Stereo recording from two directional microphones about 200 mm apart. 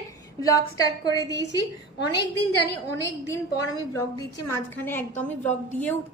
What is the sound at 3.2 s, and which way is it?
A woman's voice, 15° left (ahead or behind).